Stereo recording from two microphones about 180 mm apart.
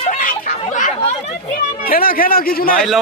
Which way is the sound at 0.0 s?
45° left (ahead or behind).